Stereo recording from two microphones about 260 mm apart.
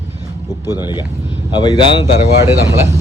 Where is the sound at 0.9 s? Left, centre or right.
Centre.